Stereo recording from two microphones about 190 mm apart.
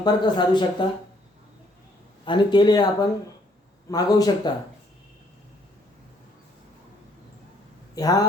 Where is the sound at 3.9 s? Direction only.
20° left (ahead or behind).